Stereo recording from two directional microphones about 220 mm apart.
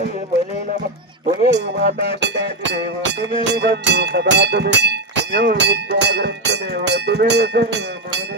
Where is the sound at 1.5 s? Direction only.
50° right (ahead or behind).